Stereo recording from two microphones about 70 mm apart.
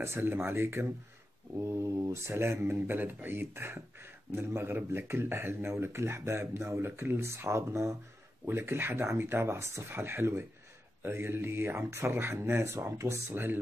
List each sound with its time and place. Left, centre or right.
0.0 s speech: right
13.3 s speech: right